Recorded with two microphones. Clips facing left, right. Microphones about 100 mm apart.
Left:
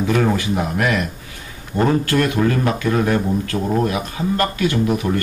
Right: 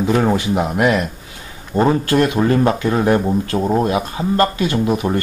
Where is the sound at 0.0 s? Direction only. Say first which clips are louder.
Right 2 dB; 20° right (ahead or behind).